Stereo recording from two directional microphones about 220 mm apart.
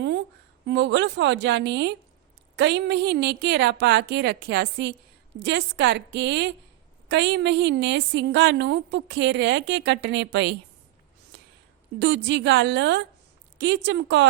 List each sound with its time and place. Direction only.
0.0 s a sound: 50° right (ahead or behind)
0.7 s a woman's voice: 50° right (ahead or behind)
11.3 s whispering: 50° right (ahead or behind)
11.9 s a woman's voice: 55° right (ahead or behind)